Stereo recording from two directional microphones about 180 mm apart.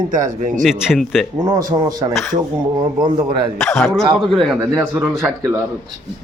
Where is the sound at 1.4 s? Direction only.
20° right (ahead or behind).